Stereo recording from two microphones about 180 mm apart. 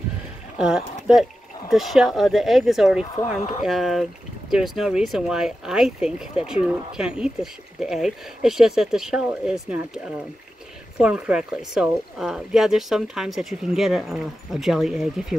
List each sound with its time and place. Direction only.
0.6 s speech: 5° right (ahead or behind)
3.3 s speech: 35° left (ahead or behind)
3.6 s speech: centre (ahead or behind)
11.0 s speech: 5° right (ahead or behind)